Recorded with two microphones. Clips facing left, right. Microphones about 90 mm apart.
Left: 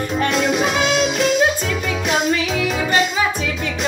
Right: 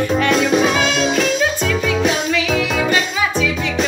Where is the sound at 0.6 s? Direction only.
60° right (ahead or behind).